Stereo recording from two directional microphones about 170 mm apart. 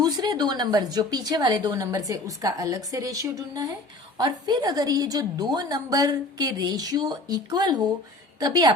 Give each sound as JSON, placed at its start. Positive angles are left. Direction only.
{"t": 0.0, "sound": "speech", "side_deg": -25}